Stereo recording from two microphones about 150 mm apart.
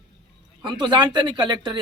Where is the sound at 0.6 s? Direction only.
30° right (ahead or behind).